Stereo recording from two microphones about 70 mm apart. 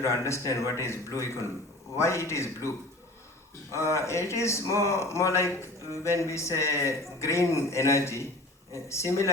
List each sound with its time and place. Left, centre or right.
0.0 s speech: left